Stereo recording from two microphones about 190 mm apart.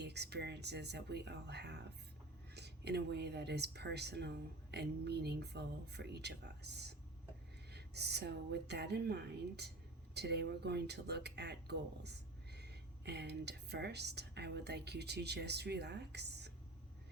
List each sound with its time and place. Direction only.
0.0 s speech: 60° right (ahead or behind)